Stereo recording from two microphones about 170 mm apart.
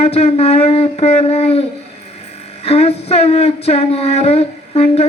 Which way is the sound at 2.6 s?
40° left (ahead or behind).